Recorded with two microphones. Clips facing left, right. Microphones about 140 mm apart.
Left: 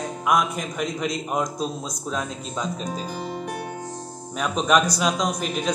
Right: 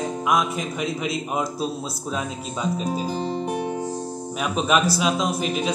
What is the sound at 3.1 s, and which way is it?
Music, 30° right (ahead or behind).